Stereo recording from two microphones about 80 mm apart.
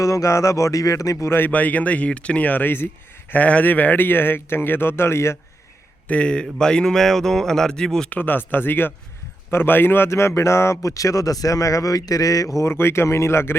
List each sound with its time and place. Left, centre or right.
0.0 s a man's voice: left
1.5 s speech: centre
6.1 s a sound: centre
8.1 s a man's voice: left
12.5 s speech: left